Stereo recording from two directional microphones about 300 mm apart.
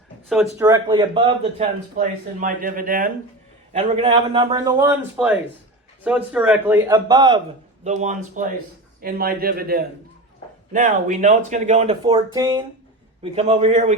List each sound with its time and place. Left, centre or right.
0.4 s a man's voice: centre